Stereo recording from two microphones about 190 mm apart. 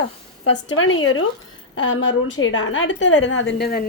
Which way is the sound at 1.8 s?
75° left (ahead or behind).